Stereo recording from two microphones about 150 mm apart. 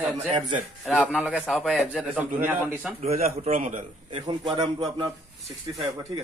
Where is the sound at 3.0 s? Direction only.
45° right (ahead or behind).